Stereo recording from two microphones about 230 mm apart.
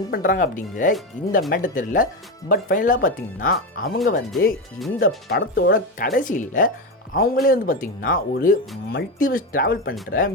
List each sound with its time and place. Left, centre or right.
0.1 s speech: left